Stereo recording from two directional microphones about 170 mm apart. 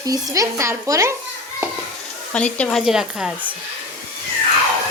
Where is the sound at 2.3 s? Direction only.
5° left (ahead or behind).